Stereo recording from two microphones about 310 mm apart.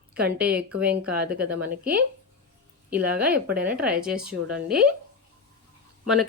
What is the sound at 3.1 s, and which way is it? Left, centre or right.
Speech, centre.